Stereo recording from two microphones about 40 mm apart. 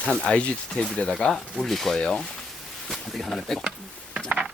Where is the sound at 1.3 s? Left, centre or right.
Centre.